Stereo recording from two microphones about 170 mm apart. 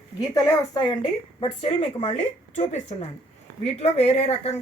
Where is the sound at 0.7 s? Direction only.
25° left (ahead or behind).